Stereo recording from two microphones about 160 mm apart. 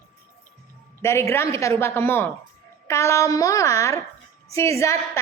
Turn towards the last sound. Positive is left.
turn(degrees=20)  # may be behind; listen again after turning